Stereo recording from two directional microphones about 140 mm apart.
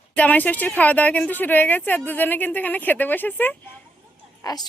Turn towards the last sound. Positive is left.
turn(degrees=30)  # may be behind; listen again after turning